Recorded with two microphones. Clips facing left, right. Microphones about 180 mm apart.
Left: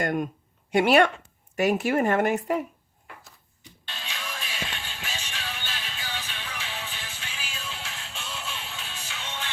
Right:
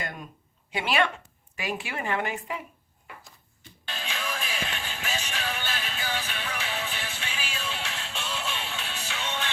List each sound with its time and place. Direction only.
0.0 s speech: 55° left (ahead or behind)
4.1 s music: 55° right (ahead or behind); by 9.5 s 75° right (ahead or behind)